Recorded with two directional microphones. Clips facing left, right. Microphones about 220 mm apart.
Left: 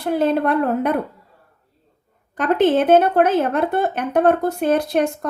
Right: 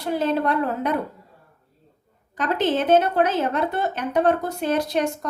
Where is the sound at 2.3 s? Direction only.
55° left (ahead or behind).